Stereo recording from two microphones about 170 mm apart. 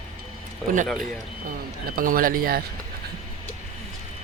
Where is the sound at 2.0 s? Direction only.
55° right (ahead or behind).